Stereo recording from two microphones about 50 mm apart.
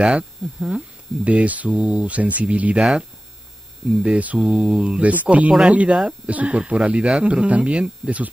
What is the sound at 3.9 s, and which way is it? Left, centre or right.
Mains hum, centre.